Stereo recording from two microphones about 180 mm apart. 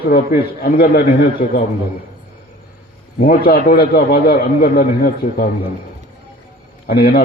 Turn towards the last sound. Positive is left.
turn(degrees=55)  # may be behind; listen again after turning